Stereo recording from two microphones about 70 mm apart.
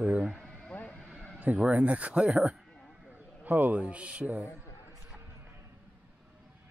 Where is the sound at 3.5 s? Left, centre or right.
Right.